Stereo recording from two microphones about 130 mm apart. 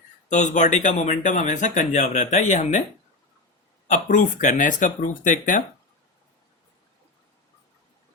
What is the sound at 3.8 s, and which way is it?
Speech, 70° left (ahead or behind).